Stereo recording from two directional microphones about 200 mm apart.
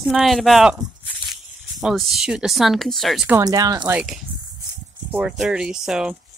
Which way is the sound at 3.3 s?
15° right (ahead or behind).